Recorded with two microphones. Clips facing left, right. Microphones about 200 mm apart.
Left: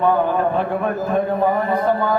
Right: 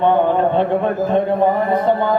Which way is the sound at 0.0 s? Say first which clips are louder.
Right 3 dB; 25° right (ahead or behind).